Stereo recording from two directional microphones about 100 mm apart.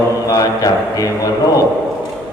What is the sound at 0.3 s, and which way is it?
A man's voice, 35° left (ahead or behind).